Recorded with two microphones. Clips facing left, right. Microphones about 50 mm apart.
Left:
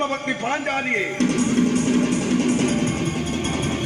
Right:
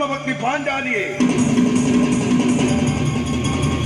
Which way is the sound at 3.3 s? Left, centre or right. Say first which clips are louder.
Right 3 dB; right.